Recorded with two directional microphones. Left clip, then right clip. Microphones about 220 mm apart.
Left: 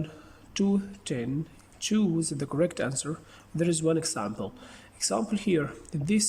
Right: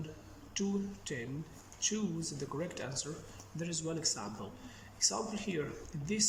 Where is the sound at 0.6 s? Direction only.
50° left (ahead or behind).